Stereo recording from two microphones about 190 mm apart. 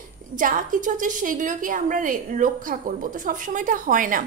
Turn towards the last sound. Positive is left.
turn(degrees=-45)  # may be behind; listen again after turning